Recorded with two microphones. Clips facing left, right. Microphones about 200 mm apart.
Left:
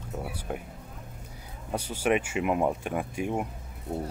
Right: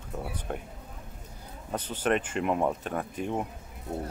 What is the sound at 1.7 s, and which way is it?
Speech, 10° left (ahead or behind).